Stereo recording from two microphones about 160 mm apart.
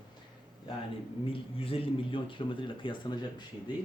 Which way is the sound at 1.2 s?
35° left (ahead or behind).